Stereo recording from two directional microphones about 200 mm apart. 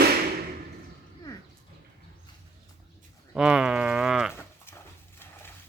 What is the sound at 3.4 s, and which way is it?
Cattle, 5° right (ahead or behind).